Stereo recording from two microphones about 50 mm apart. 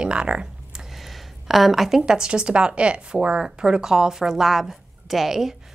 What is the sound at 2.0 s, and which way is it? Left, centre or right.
Speech, centre.